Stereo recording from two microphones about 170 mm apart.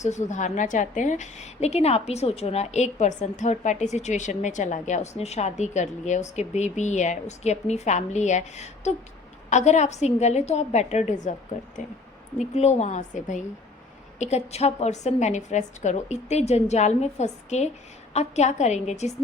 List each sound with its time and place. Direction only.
0.0 s a woman's voice: 45° left (ahead or behind)